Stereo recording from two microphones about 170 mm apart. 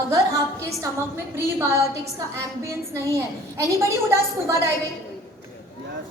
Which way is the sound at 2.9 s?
15° right (ahead or behind).